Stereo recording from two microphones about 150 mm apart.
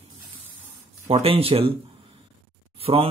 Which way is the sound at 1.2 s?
40° right (ahead or behind).